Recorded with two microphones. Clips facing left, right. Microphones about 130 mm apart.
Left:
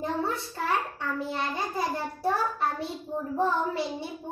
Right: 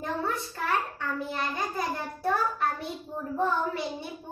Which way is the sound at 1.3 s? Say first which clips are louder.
Left 1 dB; 25° left (ahead or behind).